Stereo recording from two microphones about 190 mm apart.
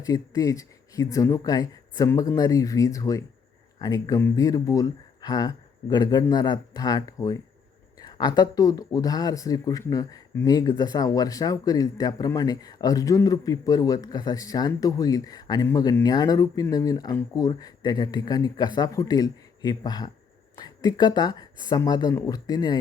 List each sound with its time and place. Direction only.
0.0 s speech: 20° left (ahead or behind)